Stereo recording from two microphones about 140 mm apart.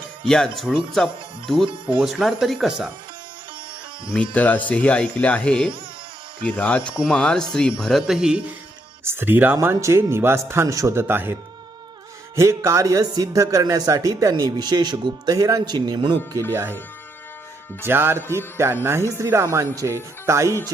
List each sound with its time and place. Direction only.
0.3 s speech: 5° left (ahead or behind)
4.1 s a man's voice: 10° left (ahead or behind); by 11.3 s 15° right (ahead or behind)
12.4 s speech: 20° right (ahead or behind)
16.5 s speech: 20° right (ahead or behind)
17.8 s a man's voice: 15° right (ahead or behind)